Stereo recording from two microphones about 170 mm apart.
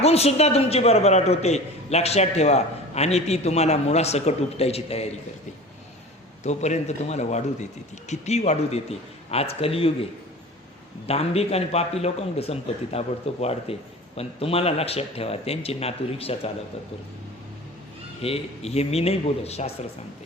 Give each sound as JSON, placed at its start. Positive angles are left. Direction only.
{"t": 0.0, "sound": "a man's voice", "side_deg": 40}
{"t": 6.4, "sound": "a man's voice", "side_deg": 40}
{"t": 18.2, "sound": "a man's voice", "side_deg": 35}